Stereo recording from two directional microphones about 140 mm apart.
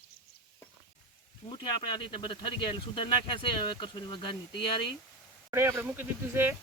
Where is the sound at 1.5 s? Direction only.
35° left (ahead or behind).